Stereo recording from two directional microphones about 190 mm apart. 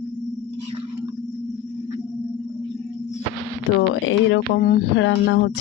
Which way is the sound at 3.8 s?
85° left.